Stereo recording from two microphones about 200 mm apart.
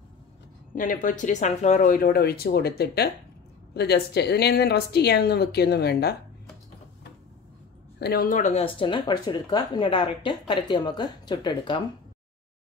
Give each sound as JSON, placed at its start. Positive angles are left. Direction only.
{"t": 0.7, "sound": "a woman's voice", "side_deg": 40}
{"t": 8.0, "sound": "speech", "side_deg": 50}